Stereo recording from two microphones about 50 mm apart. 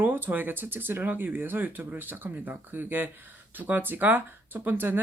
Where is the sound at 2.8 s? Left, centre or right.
Right.